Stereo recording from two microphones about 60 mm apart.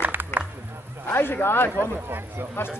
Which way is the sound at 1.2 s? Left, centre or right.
Left.